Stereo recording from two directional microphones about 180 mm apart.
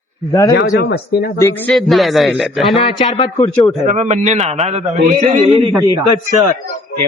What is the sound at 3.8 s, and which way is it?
A man's voice, 35° right (ahead or behind).